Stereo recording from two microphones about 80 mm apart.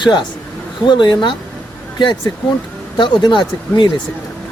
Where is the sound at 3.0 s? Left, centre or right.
Left.